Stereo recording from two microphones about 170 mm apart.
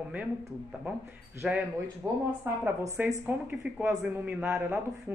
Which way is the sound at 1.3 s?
10° right (ahead or behind).